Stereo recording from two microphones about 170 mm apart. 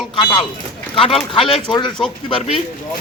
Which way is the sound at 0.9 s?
30° left (ahead or behind).